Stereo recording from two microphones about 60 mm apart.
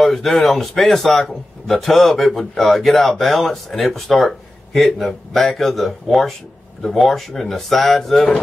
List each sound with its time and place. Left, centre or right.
0.0 s speech: centre